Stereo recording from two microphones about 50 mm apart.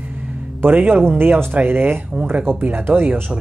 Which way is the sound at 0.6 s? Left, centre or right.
Right.